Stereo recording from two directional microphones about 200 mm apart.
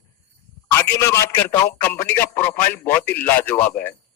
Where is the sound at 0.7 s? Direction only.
15° left (ahead or behind).